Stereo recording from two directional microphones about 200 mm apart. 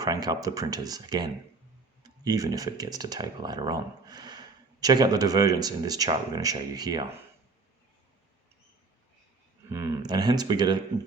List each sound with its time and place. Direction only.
0.0 s speech: 20° right (ahead or behind)
9.6 s speech: 15° right (ahead or behind)